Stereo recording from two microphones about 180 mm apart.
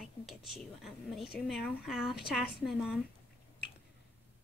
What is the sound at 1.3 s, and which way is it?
A woman's voice, centre (ahead or behind).